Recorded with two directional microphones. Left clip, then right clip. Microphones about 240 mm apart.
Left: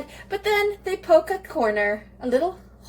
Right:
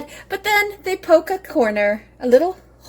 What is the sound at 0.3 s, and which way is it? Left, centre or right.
Speech, right.